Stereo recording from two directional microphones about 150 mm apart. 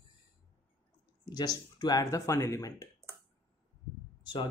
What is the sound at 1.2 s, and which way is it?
Speech, 25° left (ahead or behind).